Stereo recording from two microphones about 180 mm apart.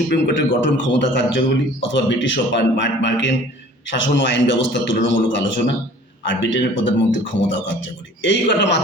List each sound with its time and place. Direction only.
0.1 s a man's voice: 90° left